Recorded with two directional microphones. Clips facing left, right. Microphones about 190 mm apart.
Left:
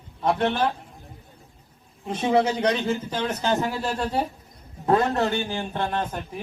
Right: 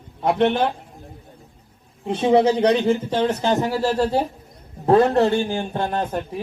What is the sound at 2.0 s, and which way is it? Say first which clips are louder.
A man's voice: right 5 dB; 30° right (ahead or behind).